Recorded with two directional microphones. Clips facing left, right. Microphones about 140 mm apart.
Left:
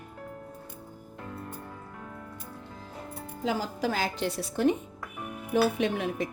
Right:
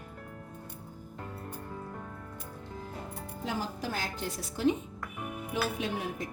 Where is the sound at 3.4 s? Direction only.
90° left; by 4.7 s 60° left (ahead or behind).